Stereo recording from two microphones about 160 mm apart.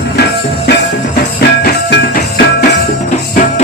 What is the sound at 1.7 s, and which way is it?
Music, 75° left (ahead or behind).